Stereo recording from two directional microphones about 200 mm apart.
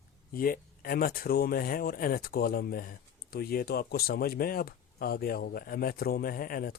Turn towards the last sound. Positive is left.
turn(degrees=45)  # may be behind; listen again after turning